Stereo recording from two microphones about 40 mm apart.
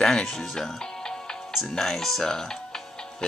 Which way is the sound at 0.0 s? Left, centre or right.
Centre.